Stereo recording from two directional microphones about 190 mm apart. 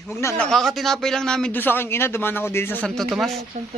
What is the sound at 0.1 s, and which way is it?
Speech, 15° left (ahead or behind).